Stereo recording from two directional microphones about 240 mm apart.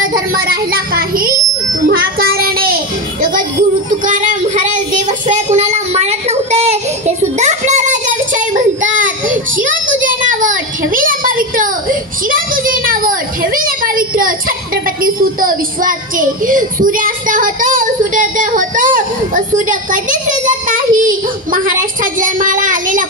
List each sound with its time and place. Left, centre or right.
0.3 s a child's voice: right
1.9 s child singing: right
4.0 s a child's voice: right
5.3 s child singing: right
10.2 s a sound: right
15.4 s child singing: right